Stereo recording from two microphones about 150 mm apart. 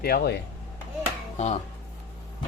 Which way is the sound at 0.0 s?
90° left.